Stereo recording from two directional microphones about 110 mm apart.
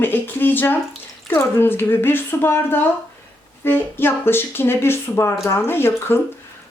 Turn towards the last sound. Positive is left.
turn(degrees=20)  # may be behind; listen again after turning